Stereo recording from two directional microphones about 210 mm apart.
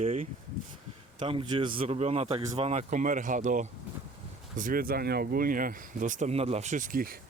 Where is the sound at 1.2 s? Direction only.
25° right (ahead or behind).